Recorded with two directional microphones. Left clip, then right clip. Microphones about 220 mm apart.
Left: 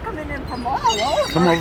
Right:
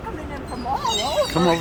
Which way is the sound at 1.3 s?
15° left (ahead or behind).